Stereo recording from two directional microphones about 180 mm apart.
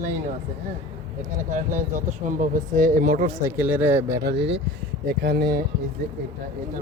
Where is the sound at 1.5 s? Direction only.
45° right (ahead or behind).